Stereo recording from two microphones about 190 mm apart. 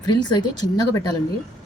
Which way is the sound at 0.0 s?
20° left (ahead or behind).